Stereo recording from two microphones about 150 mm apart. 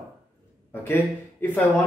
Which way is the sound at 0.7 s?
15° left (ahead or behind).